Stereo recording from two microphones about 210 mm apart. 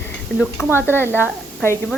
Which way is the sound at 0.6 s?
5° right (ahead or behind).